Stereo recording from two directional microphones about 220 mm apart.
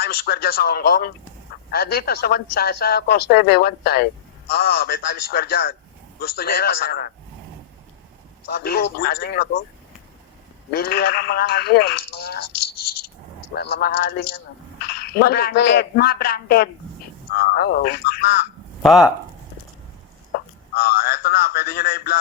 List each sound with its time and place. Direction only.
0.0 s a man's voice: 45° left (ahead or behind)
8.5 s a man's voice: 45° left (ahead or behind)
10.7 s a man's voice: 45° left (ahead or behind)
13.5 s a man's voice: 50° left (ahead or behind)
18.8 s speech: centre (ahead or behind)
20.3 s a sound: 45° left (ahead or behind)